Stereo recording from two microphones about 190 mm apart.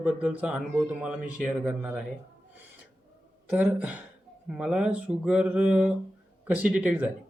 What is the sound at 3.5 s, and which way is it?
Speech, 5° right (ahead or behind).